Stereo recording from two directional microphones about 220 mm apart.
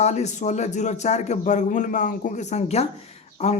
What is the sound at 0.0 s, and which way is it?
A man's voice, 30° left (ahead or behind).